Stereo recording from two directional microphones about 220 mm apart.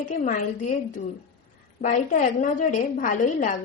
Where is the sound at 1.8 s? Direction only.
35° left (ahead or behind).